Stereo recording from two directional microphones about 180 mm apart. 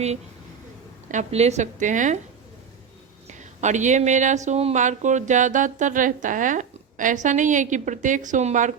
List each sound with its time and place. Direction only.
1.1 s speech: 35° right (ahead or behind)
3.2 s speech: 40° right (ahead or behind)